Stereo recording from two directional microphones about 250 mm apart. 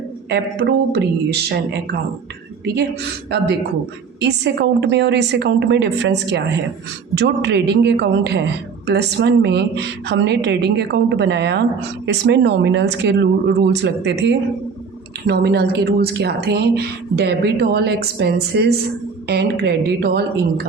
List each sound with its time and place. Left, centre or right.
0.3 s a woman's voice: right
3.2 s a woman's voice: right